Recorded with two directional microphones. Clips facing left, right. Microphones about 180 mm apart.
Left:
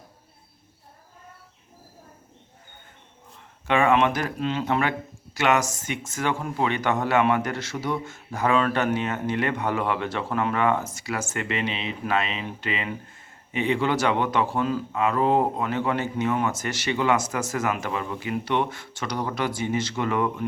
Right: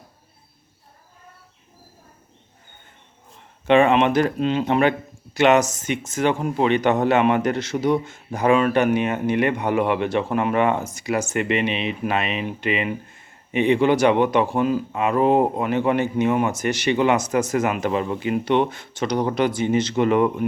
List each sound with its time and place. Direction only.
3.7 s speech: 20° right (ahead or behind)